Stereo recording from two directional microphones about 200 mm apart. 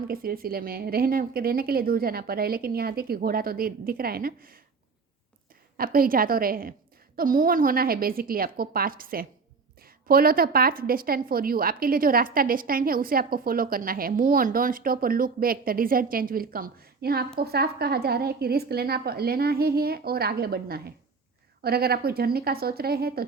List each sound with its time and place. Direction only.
0.1 s a woman's voice: 45° right (ahead or behind)
5.7 s a woman's voice: 45° right (ahead or behind)